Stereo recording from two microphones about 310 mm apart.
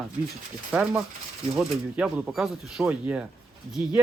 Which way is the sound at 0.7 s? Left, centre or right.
Centre.